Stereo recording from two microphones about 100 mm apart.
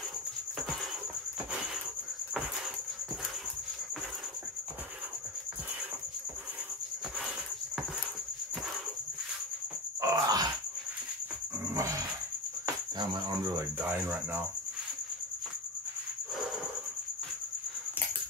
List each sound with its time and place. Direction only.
10.0 s groan: 40° right (ahead or behind)
13.7 s speech: 25° right (ahead or behind)